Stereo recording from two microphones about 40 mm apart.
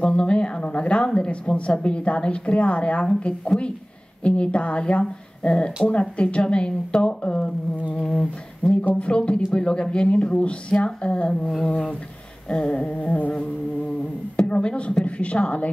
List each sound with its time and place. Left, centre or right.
0.0 s a woman's voice: left
4.2 s speech: left
8.0 s humming: centre
8.8 s speech: left
12.4 s a woman's voice: left
14.5 s a woman's voice: left